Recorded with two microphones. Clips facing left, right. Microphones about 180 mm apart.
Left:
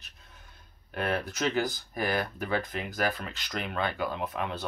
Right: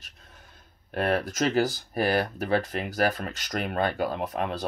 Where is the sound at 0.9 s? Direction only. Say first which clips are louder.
Right 5 dB; 40° right (ahead or behind).